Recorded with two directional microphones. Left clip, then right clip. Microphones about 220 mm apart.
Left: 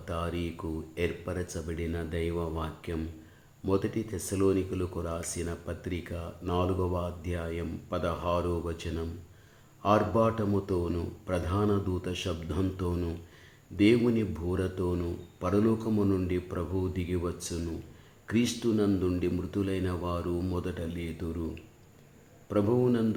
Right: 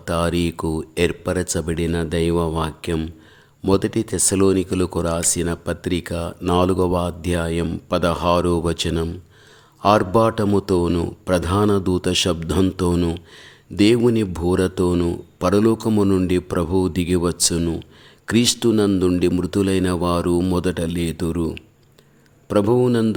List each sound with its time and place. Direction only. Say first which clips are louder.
0.0 s speech: right 13 dB; 50° right (ahead or behind)
22.4 s speech: right 10 dB; 50° right (ahead or behind)